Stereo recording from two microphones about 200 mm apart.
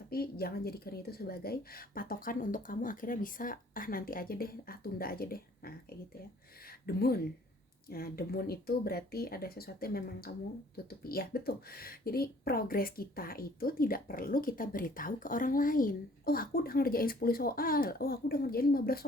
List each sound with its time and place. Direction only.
0.1 s speech: 50° left (ahead or behind)